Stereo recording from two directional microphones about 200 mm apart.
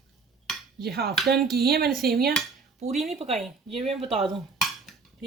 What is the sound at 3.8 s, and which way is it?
Speech, 30° right (ahead or behind).